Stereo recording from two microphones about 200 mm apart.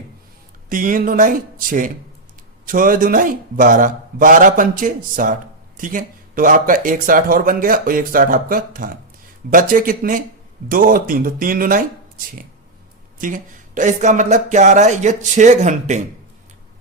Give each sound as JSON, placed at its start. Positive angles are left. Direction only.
{"t": 0.7, "sound": "a man's voice", "side_deg": -45}